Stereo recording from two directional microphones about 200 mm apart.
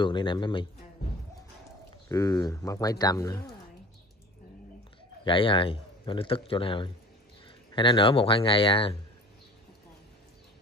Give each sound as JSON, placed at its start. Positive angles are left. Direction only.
{"t": 0.0, "sound": "a man's voice", "side_deg": 25}
{"t": 2.0, "sound": "speech", "side_deg": 20}
{"t": 5.2, "sound": "a man's voice", "side_deg": 25}